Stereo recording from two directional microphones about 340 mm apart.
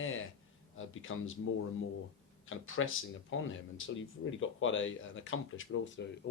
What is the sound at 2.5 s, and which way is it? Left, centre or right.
Speech, left.